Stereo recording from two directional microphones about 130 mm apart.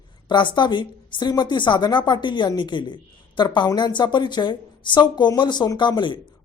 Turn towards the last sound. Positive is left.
turn(degrees=35)  # may be behind; listen again after turning